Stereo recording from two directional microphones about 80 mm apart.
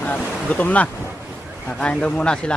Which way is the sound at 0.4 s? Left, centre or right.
Centre.